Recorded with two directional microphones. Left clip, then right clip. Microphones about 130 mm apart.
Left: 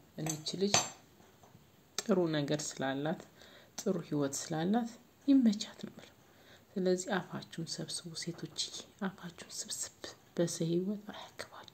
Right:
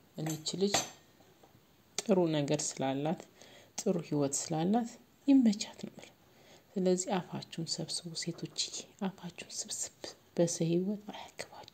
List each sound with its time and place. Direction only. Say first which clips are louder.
0.1 s cutlery: right 1 dB; 40° right (ahead or behind)
2.0 s speech: right 2 dB; 35° right (ahead or behind)